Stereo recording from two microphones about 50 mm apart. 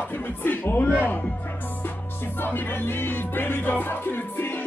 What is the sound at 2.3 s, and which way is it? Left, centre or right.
Music, left.